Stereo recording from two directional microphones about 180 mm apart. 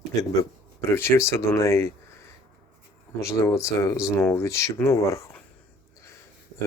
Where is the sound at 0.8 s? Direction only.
15° left (ahead or behind).